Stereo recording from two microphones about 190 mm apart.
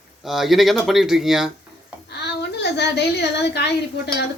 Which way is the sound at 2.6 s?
60° left (ahead or behind).